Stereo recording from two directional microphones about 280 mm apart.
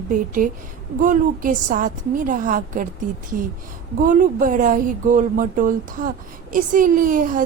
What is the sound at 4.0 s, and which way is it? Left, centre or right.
Speech, right.